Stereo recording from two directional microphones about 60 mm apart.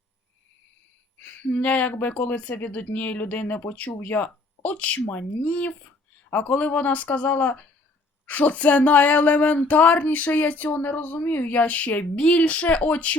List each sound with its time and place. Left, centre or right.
1.2 s speech: left